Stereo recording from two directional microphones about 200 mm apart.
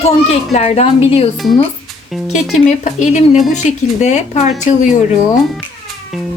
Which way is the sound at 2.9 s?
35° left (ahead or behind).